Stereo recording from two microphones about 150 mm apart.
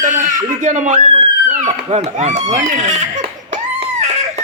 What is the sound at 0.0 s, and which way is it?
Speech, 55° right (ahead or behind).